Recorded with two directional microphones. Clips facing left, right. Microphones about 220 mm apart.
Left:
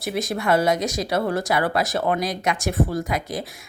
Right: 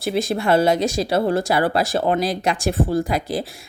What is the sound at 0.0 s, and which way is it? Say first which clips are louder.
Speech: right 4 dB; 30° right (ahead or behind).